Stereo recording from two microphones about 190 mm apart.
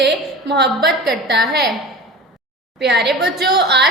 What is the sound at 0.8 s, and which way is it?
Speech, centre (ahead or behind).